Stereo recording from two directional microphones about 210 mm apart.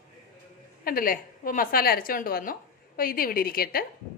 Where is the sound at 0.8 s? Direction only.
45° left (ahead or behind).